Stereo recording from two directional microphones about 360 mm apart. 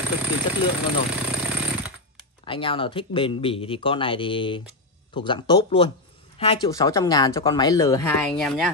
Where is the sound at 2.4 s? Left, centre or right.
Centre.